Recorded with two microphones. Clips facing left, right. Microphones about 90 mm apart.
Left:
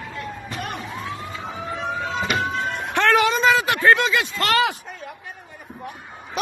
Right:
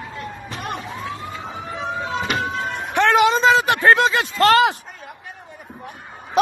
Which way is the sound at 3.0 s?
20° right (ahead or behind).